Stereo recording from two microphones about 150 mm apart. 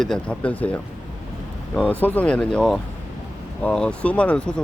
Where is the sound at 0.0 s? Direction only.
5° left (ahead or behind).